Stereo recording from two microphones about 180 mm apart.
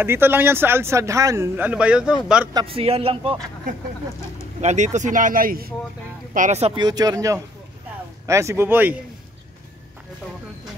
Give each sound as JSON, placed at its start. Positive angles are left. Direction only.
{"t": 0.0, "sound": "speech", "side_deg": -10}
{"t": 2.5, "sound": "speech", "side_deg": -30}
{"t": 4.6, "sound": "speech", "side_deg": -40}
{"t": 6.3, "sound": "speech", "side_deg": -40}
{"t": 6.8, "sound": "speech", "side_deg": -20}